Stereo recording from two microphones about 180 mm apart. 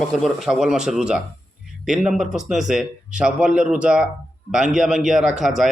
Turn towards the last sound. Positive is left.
turn(degrees=0)  # may be behind; listen again after turning